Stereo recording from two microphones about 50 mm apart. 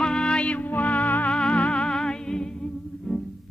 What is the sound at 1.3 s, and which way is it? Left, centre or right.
Music, centre.